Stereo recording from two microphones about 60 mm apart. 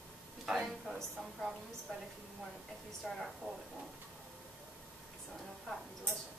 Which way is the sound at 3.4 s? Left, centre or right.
Centre.